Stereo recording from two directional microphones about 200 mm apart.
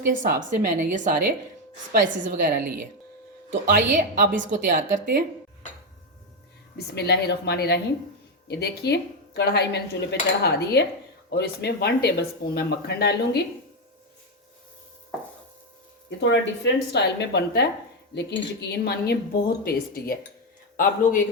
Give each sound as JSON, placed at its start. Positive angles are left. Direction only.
{"t": 0.0, "sound": "a woman's voice", "side_deg": -40}
{"t": 6.7, "sound": "speech", "side_deg": 55}
{"t": 16.0, "sound": "speech", "side_deg": 60}